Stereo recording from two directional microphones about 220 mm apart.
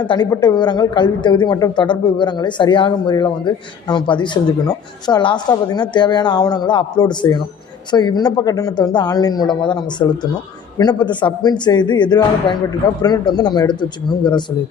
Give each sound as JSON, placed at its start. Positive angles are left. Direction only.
{"t": 0.0, "sound": "a woman's voice", "side_deg": 20}